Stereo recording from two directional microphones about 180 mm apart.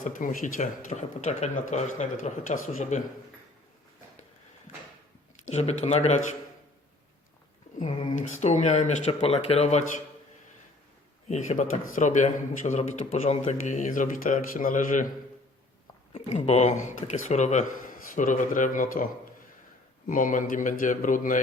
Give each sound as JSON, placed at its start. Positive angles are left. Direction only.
{"t": 0.0, "sound": "speech", "side_deg": 45}
{"t": 5.5, "sound": "speech", "side_deg": 35}
{"t": 7.8, "sound": "speech", "side_deg": 45}
{"t": 11.3, "sound": "speech", "side_deg": 40}
{"t": 16.1, "sound": "speech", "side_deg": 35}
{"t": 20.1, "sound": "speech", "side_deg": 45}